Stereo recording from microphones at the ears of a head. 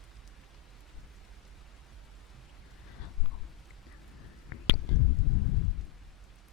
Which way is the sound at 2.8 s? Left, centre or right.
Left.